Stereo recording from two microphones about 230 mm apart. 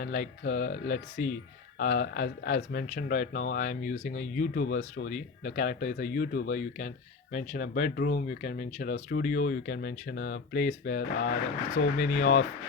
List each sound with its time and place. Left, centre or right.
0.0 s speech: left